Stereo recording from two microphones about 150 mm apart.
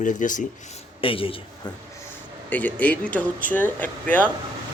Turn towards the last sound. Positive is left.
turn(degrees=10)  # may be behind; listen again after turning